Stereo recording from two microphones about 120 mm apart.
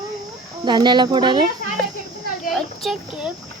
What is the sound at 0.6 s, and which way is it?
Speech, 40° right (ahead or behind).